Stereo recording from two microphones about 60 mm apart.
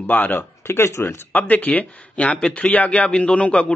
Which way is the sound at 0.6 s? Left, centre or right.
Left.